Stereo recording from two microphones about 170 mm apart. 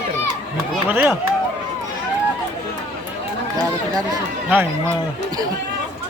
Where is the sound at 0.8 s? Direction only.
10° right (ahead or behind).